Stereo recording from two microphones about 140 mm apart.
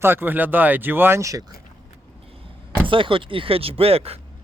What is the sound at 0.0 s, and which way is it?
Speech, 15° right (ahead or behind).